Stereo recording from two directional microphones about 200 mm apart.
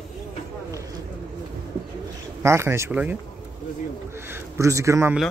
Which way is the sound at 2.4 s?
15° right (ahead or behind).